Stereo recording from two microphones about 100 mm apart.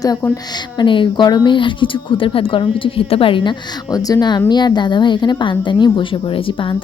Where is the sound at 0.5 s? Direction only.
55° left (ahead or behind).